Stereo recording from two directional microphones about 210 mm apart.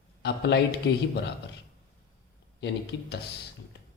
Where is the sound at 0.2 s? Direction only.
55° left (ahead or behind).